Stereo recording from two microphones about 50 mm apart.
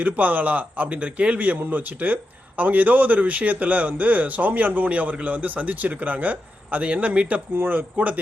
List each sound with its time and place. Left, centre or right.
0.0 s speech: right
7.5 s speech: right